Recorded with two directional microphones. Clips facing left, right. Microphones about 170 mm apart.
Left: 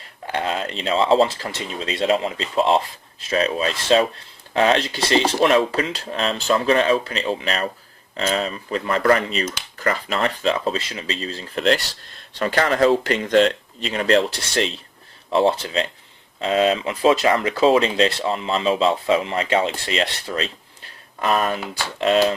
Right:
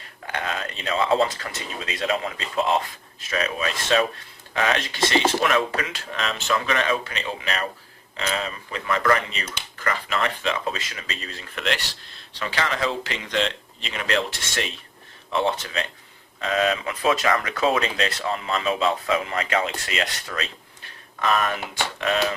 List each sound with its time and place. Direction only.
0.3 s speech: 30° left (ahead or behind)
12.3 s speech: 45° left (ahead or behind); by 22.4 s 30° left (ahead or behind)